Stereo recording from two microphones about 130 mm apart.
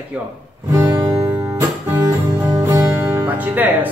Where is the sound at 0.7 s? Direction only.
20° right (ahead or behind).